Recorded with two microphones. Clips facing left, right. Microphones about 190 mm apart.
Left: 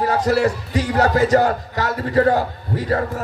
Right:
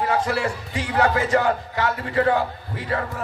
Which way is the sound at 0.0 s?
40° left (ahead or behind).